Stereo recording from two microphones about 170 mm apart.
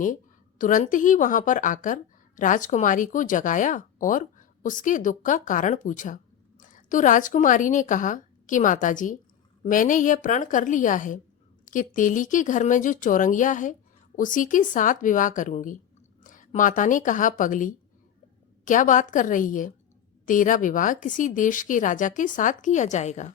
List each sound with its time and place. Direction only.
0.6 s a woman's voice: 50° left (ahead or behind)